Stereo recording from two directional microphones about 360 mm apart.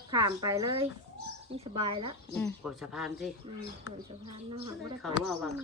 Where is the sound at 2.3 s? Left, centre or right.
Centre.